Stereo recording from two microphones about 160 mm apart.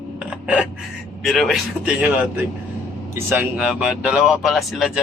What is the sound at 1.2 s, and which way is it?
Speech, centre (ahead or behind).